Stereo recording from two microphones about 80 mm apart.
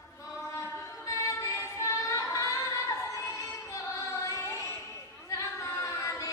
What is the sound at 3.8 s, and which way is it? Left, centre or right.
Music, left.